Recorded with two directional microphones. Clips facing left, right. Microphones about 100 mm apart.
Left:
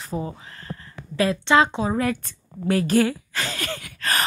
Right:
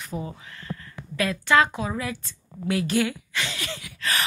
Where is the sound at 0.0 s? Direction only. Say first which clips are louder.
Left 4 dB; 35° left (ahead or behind).